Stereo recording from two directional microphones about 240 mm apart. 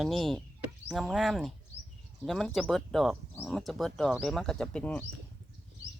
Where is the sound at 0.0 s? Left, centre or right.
Centre.